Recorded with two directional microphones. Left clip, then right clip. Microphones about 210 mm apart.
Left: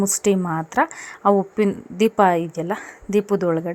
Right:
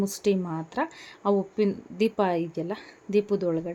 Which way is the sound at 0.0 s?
20° left (ahead or behind).